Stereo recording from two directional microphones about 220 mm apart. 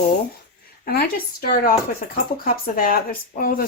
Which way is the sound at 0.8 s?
45° left (ahead or behind).